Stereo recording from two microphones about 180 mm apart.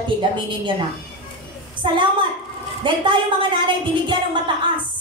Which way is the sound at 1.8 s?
30° right (ahead or behind).